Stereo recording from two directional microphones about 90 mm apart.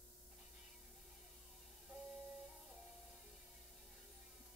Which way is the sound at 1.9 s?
5° right (ahead or behind).